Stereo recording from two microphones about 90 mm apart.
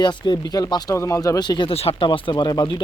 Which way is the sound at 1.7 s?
85° left.